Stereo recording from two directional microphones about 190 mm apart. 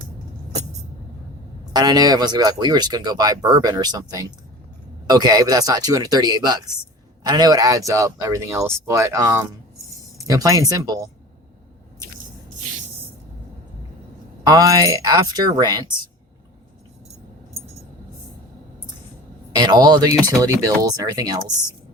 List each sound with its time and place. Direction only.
1.7 s speech: 20° right (ahead or behind)
14.4 s speech: 20° right (ahead or behind)
19.5 s speech: 20° right (ahead or behind)